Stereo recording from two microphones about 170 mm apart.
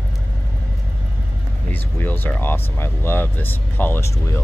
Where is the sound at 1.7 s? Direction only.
10° left (ahead or behind).